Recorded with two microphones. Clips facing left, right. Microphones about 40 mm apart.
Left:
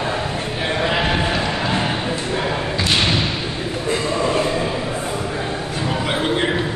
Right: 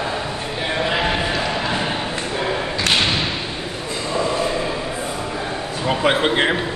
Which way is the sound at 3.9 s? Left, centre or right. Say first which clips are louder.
Left 2 dB; left.